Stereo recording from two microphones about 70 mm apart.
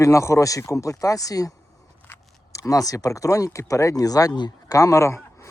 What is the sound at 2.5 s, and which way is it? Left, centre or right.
Speech, left.